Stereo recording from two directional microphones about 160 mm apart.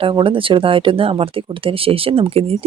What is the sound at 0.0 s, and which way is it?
A woman's voice, 35° right (ahead or behind).